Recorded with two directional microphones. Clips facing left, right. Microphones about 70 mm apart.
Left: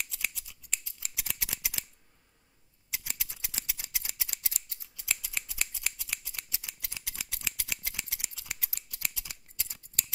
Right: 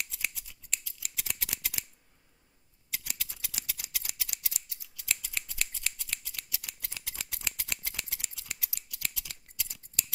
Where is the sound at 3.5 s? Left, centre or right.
Left.